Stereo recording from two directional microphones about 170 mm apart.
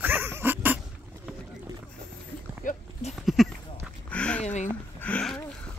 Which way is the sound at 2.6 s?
50° left (ahead or behind).